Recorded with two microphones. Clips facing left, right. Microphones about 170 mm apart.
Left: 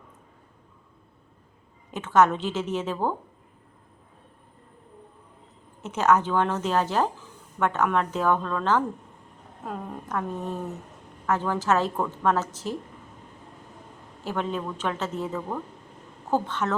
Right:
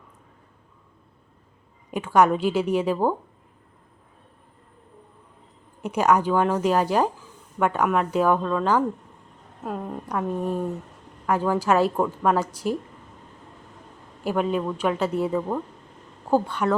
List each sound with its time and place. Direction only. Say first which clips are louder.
1.9 s a woman's voice: right 2 dB; 10° right (ahead or behind)
5.8 s a woman's voice: right 2 dB; 10° right (ahead or behind)
14.3 s a woman's voice: right 5 dB; 10° right (ahead or behind)